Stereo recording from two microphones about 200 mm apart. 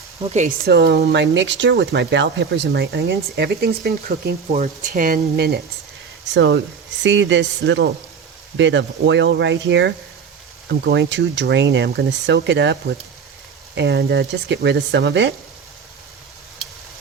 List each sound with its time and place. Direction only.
0.2 s speech: 35° right (ahead or behind); by 4.4 s 50° right (ahead or behind)
4.5 s speech: 35° right (ahead or behind)
6.2 s speech: 60° right (ahead or behind)
13.7 s speech: 55° right (ahead or behind)